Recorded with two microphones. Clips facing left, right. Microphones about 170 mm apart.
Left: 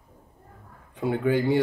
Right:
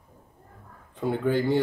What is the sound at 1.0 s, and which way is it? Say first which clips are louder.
Speech: left 1 dB; 10° left (ahead or behind).